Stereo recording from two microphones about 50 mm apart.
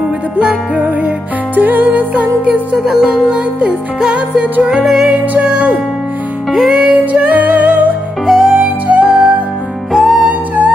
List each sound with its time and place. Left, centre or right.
0.8 s music: right
2.8 s music: centre
4.0 s music: right
4.8 s music: centre
5.4 s music: right
6.5 s music: centre
6.8 s music: right
8.3 s music: centre
10.2 s music: right